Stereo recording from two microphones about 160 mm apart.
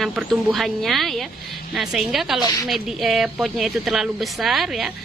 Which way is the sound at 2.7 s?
Centre (ahead or behind).